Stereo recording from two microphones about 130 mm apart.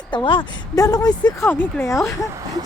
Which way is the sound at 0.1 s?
40° left (ahead or behind).